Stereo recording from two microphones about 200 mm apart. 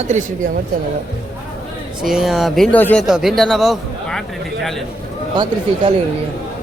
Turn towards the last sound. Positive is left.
turn(degrees=-25)  # may be behind; listen again after turning